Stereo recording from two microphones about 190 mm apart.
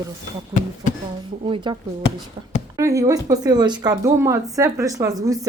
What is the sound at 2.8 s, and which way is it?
Speech, 15° right (ahead or behind).